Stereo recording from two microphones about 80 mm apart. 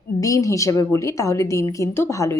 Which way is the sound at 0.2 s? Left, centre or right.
Left.